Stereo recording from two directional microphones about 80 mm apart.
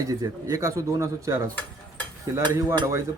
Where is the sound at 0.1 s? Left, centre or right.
Right.